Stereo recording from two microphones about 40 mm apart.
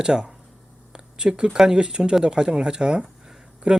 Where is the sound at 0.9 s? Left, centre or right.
Centre.